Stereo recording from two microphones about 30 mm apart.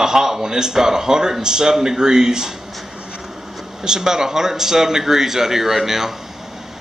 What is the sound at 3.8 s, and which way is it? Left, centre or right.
Speech, right.